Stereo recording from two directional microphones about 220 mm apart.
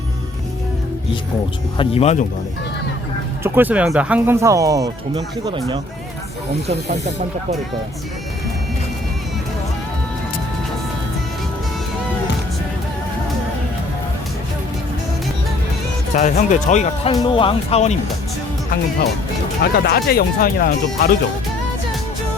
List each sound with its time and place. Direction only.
1.8 s speech: 25° left (ahead or behind)
3.4 s speech: 10° right (ahead or behind)
16.1 s speech: 35° left (ahead or behind)
19.6 s speech: 45° left (ahead or behind)